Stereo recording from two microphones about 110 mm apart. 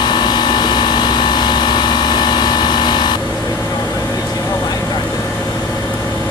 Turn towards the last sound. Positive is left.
turn(degrees=35)  # may be behind; listen again after turning